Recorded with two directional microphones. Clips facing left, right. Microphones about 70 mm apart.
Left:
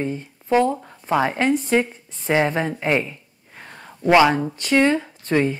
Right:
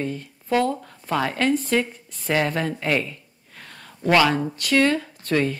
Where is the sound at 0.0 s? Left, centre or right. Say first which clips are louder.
Left 2 dB; centre.